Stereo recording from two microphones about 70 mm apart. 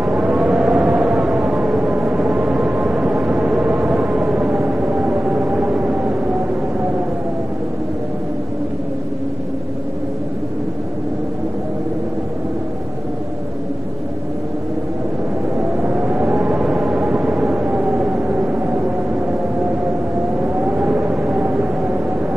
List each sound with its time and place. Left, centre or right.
0.0 s a sound: centre
1.4 s vehicle: centre
15.8 s vehicle: centre
16.3 s music: centre
20.4 s siren: centre
21.2 s a sound: centre